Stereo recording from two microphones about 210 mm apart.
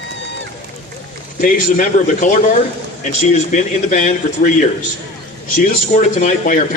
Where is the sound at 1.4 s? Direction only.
40° left (ahead or behind).